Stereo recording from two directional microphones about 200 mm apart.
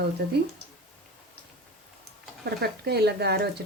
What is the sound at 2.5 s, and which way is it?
Speech, 50° right (ahead or behind).